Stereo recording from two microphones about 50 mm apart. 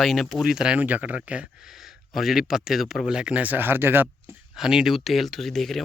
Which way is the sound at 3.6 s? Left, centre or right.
Right.